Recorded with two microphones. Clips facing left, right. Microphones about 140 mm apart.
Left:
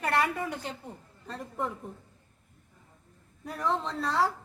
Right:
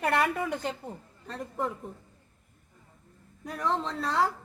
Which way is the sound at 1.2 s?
Centre (ahead or behind).